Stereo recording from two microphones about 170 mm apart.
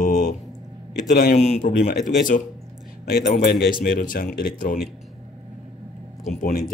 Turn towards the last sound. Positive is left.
turn(degrees=50)  # may be behind; listen again after turning